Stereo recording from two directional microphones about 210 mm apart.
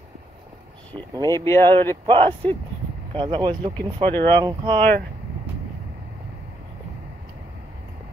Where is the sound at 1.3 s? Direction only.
15° left (ahead or behind).